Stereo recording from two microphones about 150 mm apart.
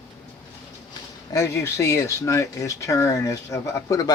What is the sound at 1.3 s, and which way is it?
Speech, 20° left (ahead or behind).